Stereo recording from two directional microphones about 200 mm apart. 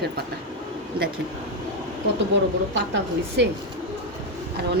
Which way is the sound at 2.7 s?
60° right (ahead or behind).